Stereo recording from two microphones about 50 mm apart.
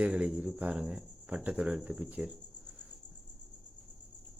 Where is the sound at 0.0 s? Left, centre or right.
Right.